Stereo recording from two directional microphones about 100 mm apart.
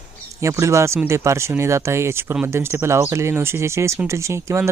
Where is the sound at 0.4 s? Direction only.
30° right (ahead or behind).